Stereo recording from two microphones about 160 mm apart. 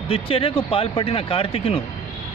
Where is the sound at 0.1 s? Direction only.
35° left (ahead or behind).